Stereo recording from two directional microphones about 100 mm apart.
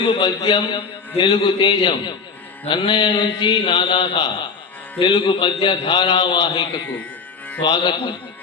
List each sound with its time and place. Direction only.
0.1 s a man's voice: 50° left (ahead or behind)